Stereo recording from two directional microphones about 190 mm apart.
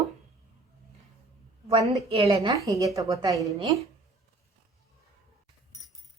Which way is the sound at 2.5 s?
15° right (ahead or behind).